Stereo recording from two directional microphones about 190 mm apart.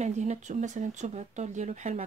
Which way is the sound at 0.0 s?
40° right (ahead or behind).